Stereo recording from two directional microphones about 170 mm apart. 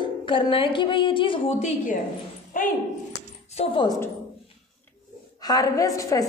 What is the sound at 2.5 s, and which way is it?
Speech, 50° left (ahead or behind).